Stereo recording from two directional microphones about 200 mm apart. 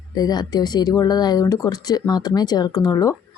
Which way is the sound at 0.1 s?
20° left (ahead or behind).